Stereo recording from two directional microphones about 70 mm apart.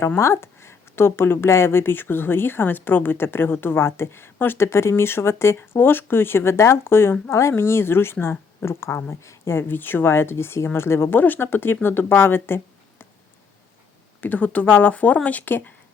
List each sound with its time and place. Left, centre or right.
0.2 s speech: left
14.2 s speech: left